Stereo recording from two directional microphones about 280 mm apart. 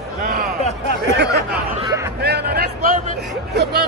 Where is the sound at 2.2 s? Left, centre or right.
Right.